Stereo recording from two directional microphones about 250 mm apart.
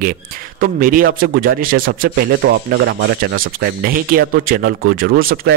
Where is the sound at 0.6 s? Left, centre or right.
Right.